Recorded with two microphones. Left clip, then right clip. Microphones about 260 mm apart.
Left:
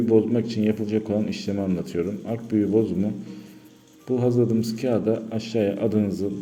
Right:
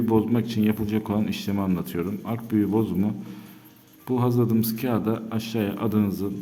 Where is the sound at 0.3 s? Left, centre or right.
Centre.